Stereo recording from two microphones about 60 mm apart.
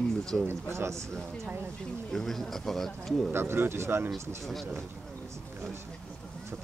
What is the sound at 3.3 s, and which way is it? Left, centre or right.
Speech, right.